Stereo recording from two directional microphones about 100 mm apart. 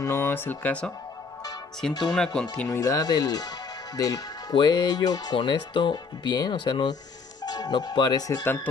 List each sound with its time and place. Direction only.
0.0 s speech: 25° left (ahead or behind); by 2.4 s 5° left (ahead or behind)
2.7 s speech: 35° left (ahead or behind)